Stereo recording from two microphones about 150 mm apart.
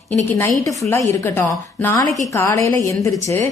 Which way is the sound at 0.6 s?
20° left (ahead or behind).